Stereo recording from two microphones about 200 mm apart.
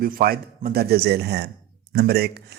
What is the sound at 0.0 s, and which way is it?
Speech, 45° right (ahead or behind).